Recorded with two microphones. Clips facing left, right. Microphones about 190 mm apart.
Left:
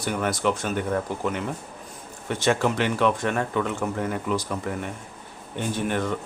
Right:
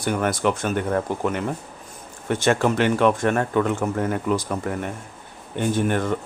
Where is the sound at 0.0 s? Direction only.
55° right (ahead or behind).